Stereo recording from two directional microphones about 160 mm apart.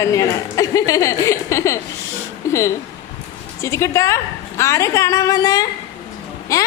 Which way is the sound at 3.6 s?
20° left (ahead or behind).